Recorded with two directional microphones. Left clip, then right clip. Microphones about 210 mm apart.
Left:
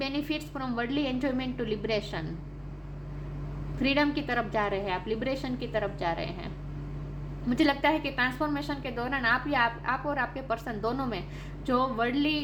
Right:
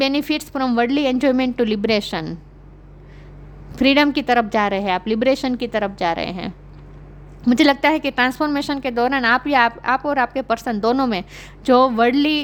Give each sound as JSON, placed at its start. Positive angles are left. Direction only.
{"t": 0.0, "sound": "a woman's voice", "side_deg": -50}
{"t": 3.8, "sound": "a woman's voice", "side_deg": -55}